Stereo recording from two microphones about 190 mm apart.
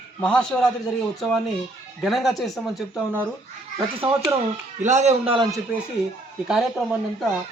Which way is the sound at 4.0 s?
30° right (ahead or behind).